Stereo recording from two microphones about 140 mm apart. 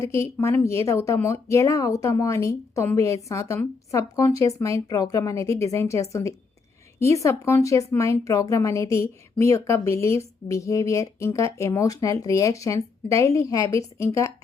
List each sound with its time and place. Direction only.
0.0 s speech: 20° left (ahead or behind)